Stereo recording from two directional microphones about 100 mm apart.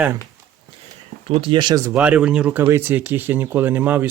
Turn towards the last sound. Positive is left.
turn(degrees=-20)  # may be behind; listen again after turning